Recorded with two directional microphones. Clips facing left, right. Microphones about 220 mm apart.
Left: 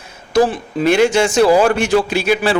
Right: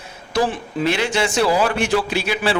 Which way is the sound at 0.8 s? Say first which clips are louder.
Left 8 dB; 45° left (ahead or behind).